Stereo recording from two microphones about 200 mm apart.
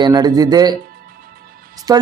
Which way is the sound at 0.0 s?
20° right (ahead or behind).